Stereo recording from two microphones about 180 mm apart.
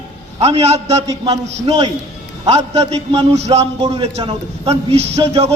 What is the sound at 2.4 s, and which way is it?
A man's voice, 35° right (ahead or behind).